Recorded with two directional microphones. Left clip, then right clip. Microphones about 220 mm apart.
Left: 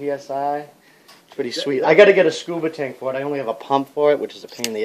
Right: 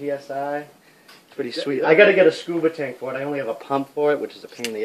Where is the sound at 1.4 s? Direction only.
30° left (ahead or behind).